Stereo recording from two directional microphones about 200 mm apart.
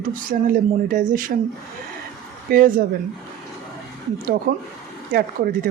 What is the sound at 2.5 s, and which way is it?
Speech, 45° right (ahead or behind).